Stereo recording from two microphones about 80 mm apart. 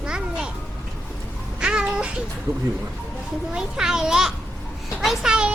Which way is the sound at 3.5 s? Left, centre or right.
Centre.